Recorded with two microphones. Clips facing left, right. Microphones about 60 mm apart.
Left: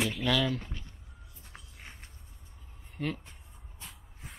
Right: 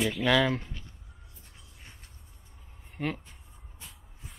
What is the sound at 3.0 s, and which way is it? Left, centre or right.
Speech, centre.